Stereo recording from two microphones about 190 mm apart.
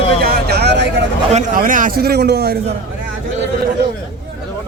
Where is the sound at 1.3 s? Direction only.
45° right (ahead or behind).